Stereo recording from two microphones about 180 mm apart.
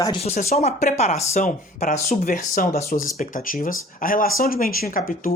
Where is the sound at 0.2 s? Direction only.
35° left (ahead or behind).